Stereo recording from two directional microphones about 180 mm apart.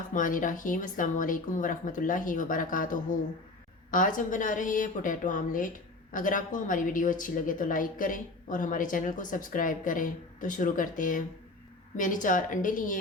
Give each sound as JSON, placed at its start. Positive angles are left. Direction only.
{"t": 0.1, "sound": "a woman's voice", "side_deg": 50}